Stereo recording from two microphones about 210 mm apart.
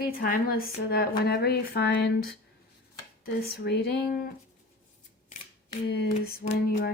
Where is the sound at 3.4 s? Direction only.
50° left (ahead or behind).